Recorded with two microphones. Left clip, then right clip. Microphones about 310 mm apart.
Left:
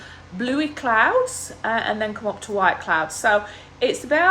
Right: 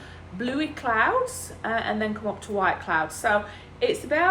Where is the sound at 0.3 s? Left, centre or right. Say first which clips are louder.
Left 5 dB; left.